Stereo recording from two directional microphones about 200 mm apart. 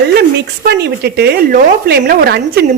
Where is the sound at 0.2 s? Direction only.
55° right (ahead or behind).